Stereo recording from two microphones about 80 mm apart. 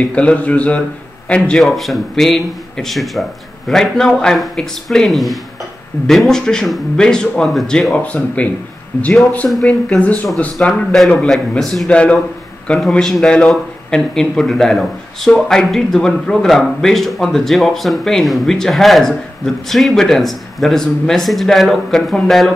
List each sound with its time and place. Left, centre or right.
0.0 s a man's voice: centre
1.6 s a man's voice: centre
9.7 s a man's voice: centre
11.9 s a man's voice: centre